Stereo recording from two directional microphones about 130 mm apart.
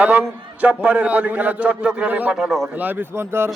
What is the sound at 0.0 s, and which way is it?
A man's voice, 10° right (ahead or behind).